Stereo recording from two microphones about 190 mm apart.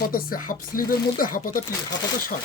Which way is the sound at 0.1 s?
50° left (ahead or behind).